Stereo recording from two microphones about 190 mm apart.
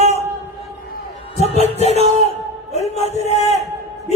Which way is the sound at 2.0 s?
35° right (ahead or behind).